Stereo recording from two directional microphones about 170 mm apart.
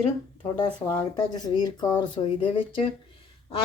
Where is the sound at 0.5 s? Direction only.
25° left (ahead or behind).